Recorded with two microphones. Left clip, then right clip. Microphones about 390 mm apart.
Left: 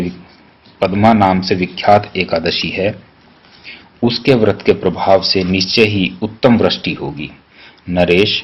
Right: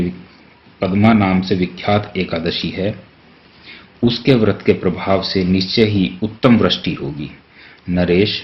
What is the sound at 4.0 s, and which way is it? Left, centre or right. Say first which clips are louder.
Speech: left 3 dB; left.